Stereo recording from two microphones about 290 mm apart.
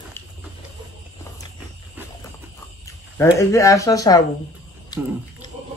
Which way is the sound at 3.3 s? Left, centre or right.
Centre.